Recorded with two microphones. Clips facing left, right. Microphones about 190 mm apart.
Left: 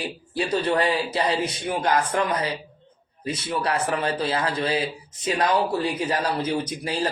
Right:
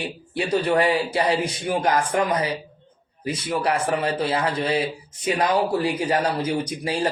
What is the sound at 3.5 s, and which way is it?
Speech, 30° right (ahead or behind).